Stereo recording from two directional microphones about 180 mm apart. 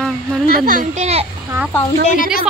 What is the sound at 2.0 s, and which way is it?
Speech, 45° left (ahead or behind).